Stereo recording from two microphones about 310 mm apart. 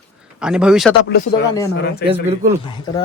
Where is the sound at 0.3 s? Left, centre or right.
Centre.